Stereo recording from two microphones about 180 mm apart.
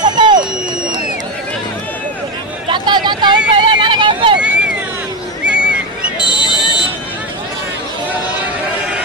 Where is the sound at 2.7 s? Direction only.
25° right (ahead or behind).